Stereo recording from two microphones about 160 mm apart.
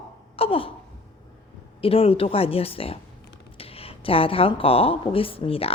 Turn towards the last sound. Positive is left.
turn(degrees=35)  # may be behind; listen again after turning